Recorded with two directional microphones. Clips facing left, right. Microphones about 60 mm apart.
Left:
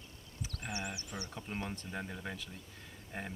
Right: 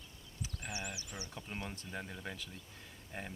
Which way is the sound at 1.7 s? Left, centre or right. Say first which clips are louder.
Left 3 dB; centre.